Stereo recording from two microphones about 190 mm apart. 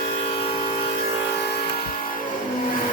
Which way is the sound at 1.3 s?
60° left (ahead or behind).